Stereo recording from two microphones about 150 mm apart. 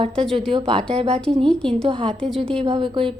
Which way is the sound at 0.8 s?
5° left (ahead or behind).